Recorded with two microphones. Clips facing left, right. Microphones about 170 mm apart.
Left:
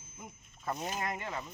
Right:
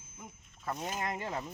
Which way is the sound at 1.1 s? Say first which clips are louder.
Right 2 dB; 35° right (ahead or behind).